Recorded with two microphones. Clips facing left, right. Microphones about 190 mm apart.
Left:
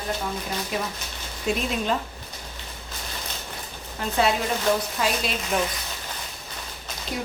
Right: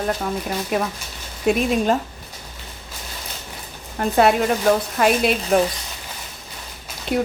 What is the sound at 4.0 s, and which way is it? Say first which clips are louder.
A woman's voice: right 7 dB; 55° right (ahead or behind).